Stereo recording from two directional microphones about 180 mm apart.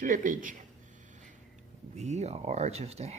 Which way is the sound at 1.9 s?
40° right (ahead or behind).